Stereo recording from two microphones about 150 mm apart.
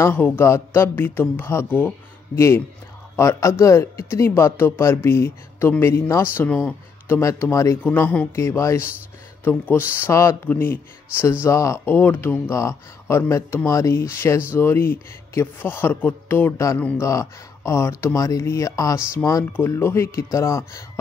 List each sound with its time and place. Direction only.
0.0 s a man's voice: 15° left (ahead or behind)